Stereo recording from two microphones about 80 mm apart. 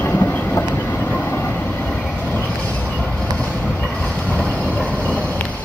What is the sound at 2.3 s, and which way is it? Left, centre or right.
Train, centre.